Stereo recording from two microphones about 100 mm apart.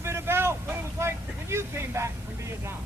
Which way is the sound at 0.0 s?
25° right (ahead or behind).